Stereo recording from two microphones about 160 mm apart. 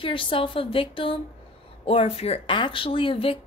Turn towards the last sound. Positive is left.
turn(degrees=35)  # may be behind; listen again after turning